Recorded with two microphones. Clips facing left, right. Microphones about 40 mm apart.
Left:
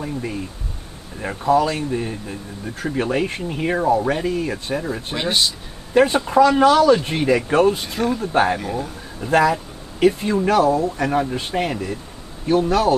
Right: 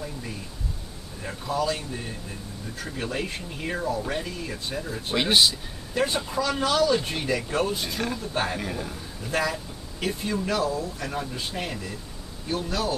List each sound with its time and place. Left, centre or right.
1.2 s speech: left
5.1 s speech: centre
5.9 s speech: left
8.5 s speech: centre
9.2 s speech: left